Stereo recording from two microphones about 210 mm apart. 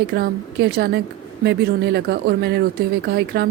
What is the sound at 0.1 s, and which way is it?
Speech, 50° right (ahead or behind).